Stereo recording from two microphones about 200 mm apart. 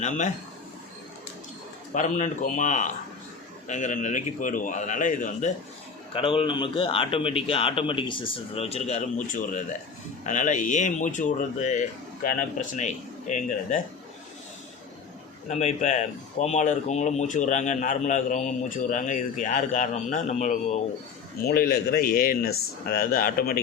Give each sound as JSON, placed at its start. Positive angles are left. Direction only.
{"t": 1.9, "sound": "speech", "side_deg": 35}
{"t": 6.1, "sound": "a man's voice", "side_deg": 25}
{"t": 15.4, "sound": "speech", "side_deg": 35}
{"t": 21.4, "sound": "speech", "side_deg": 50}